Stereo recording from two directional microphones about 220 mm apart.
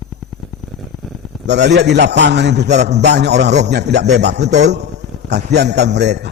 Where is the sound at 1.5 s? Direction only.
50° right (ahead or behind).